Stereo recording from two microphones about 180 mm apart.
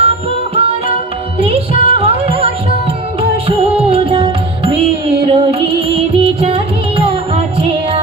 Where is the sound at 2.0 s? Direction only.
35° right (ahead or behind).